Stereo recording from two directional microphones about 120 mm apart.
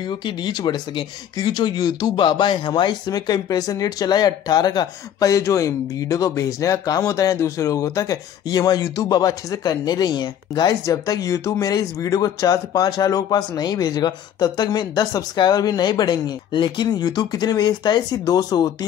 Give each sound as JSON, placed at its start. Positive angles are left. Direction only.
{"t": 0.0, "sound": "speech", "side_deg": 40}